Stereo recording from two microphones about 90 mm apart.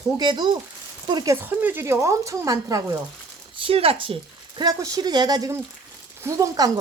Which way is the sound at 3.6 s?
90° right.